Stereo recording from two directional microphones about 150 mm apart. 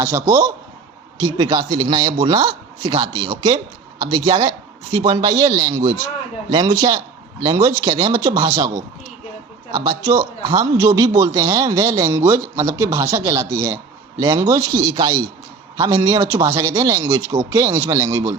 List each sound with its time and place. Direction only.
0.0 s a man's voice: 20° right (ahead or behind)
9.7 s a man's voice: 25° right (ahead or behind)